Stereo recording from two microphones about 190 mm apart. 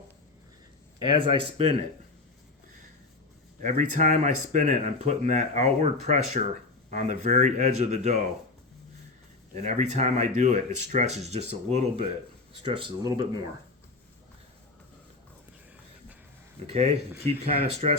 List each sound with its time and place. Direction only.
1.1 s speech: 25° right (ahead or behind)
3.6 s speech: 40° right (ahead or behind)
9.6 s speech: 35° right (ahead or behind)
16.7 s speech: 35° right (ahead or behind)